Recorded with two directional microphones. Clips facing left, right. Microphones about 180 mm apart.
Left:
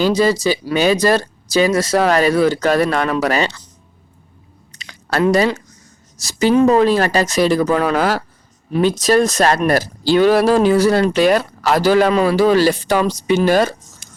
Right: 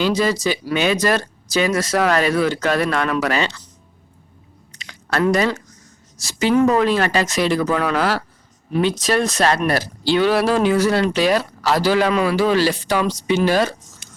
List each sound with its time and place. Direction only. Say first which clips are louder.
0.0 s speech: left 4 dB; 35° left (ahead or behind)
4.7 s a sound: left 2 dB; 35° left (ahead or behind)
6.1 s speech: left 4 dB; 40° left (ahead or behind)
6.5 s speech: left 3 dB; 25° left (ahead or behind); by 13.7 s 45° left (ahead or behind)